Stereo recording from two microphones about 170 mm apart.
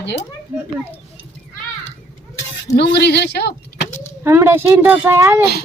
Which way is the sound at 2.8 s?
75° left (ahead or behind).